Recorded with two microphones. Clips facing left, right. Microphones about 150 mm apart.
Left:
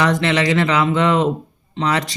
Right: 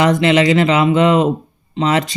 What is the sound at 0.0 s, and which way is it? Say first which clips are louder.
Speech: right 5 dB; 20° right (ahead or behind).